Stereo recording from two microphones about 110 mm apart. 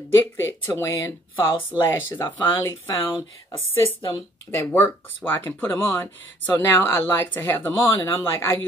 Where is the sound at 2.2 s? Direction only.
45° left (ahead or behind).